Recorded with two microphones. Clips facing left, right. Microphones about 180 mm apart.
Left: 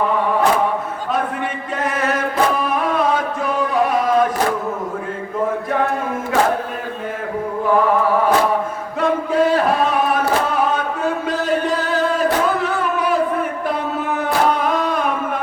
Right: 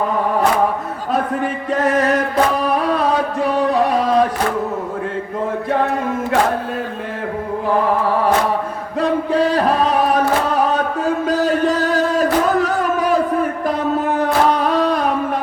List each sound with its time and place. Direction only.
1.1 s chant: 40° right (ahead or behind)
9.0 s chant: 35° right (ahead or behind)
14.2 s music: 35° right (ahead or behind)